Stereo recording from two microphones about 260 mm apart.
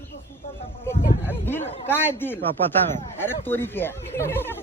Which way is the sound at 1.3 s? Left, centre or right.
Centre.